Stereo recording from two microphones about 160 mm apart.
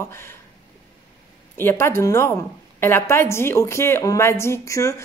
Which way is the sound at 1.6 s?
15° left (ahead or behind).